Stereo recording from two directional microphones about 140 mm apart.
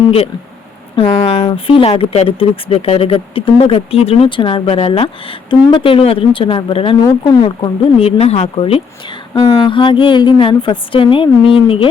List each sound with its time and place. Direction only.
0.9 s speech: 40° left (ahead or behind)
7.9 s speech: 45° left (ahead or behind)